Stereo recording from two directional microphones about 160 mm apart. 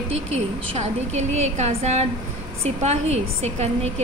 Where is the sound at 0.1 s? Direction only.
40° right (ahead or behind).